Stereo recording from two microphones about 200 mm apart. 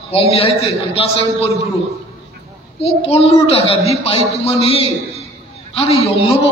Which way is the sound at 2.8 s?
30° left (ahead or behind).